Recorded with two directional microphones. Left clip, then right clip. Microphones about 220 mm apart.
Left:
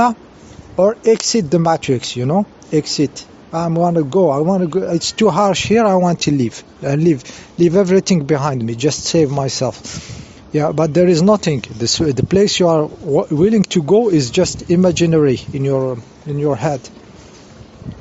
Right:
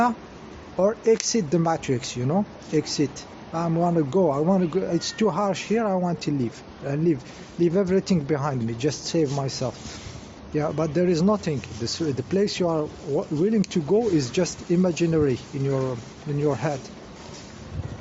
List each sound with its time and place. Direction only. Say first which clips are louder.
0.8 s speech: left 8 dB; 40° left (ahead or behind)